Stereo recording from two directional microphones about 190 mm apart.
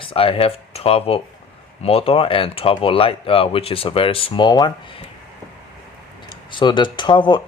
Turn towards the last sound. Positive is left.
turn(degrees=25)  # may be behind; listen again after turning